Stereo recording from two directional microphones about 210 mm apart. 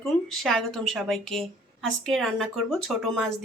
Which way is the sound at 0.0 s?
Centre (ahead or behind).